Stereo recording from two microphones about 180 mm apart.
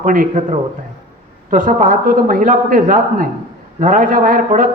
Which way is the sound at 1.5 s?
50° right (ahead or behind).